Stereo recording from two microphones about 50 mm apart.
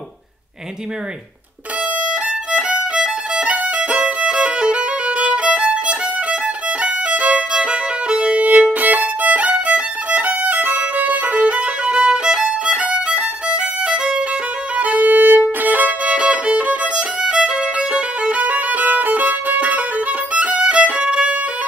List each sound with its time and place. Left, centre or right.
2.5 s violin: centre
8.7 s violin: right; by 14.2 s centre
14.8 s violin: right
16.2 s violin: right